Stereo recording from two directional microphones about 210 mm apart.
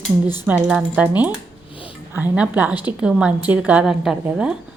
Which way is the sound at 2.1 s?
10° right (ahead or behind).